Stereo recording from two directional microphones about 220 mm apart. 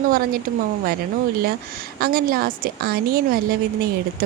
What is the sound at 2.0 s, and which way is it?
Speech, 45° right (ahead or behind).